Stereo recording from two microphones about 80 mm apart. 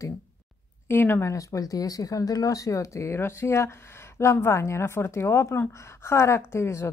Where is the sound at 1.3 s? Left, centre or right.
Left.